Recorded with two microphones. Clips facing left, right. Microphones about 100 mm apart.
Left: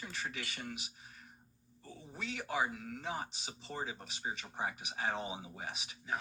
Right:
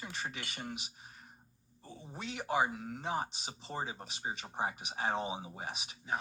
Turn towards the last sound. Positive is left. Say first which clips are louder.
# right 2 dB
turn(degrees=-25)  # may be behind; listen again after turning